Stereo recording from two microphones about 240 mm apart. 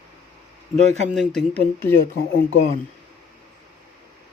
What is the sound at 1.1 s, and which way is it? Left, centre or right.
Speech, centre.